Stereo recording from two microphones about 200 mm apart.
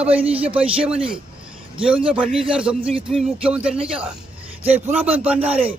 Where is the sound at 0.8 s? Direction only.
5° right (ahead or behind).